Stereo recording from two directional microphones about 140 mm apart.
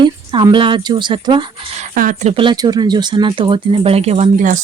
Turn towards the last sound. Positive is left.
turn(degrees=-65)  # may be behind; listen again after turning